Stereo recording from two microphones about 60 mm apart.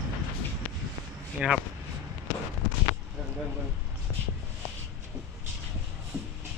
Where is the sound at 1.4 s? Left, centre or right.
Centre.